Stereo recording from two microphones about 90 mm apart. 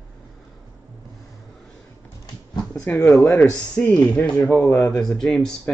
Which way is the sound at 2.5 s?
35° left (ahead or behind).